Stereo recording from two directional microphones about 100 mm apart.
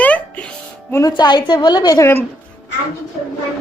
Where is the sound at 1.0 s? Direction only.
45° left (ahead or behind).